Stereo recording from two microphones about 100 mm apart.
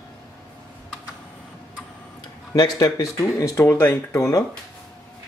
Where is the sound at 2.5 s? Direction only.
40° left (ahead or behind).